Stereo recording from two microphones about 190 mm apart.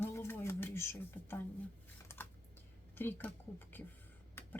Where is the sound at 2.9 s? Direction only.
10° left (ahead or behind).